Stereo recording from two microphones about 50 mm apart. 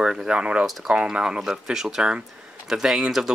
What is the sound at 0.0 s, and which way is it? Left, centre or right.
Speech, centre.